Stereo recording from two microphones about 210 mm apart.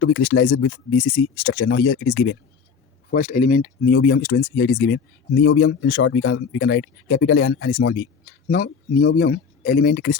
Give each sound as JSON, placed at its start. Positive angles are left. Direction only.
{"t": 0.0, "sound": "speech", "side_deg": 55}
{"t": 3.2, "sound": "speech", "side_deg": 35}
{"t": 8.2, "sound": "speech", "side_deg": 45}